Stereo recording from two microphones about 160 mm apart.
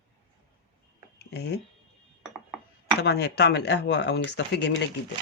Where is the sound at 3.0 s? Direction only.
90° left.